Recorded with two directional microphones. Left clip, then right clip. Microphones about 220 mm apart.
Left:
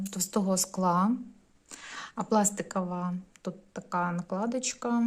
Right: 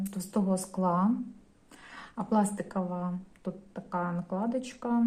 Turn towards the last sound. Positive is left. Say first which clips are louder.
# left 1 dB
turn(degrees=35)  # may be behind; listen again after turning